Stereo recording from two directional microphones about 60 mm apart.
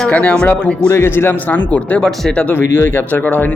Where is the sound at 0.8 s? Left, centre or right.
Left.